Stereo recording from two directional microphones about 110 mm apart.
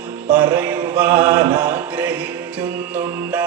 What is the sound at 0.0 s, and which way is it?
Music, 15° right (ahead or behind).